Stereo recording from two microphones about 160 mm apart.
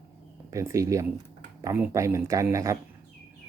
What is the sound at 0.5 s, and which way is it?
Speech, 20° right (ahead or behind).